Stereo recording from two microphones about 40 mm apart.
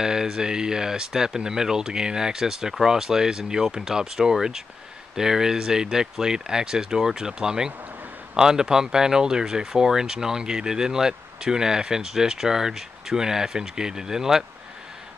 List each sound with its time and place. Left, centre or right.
0.0 s speech: centre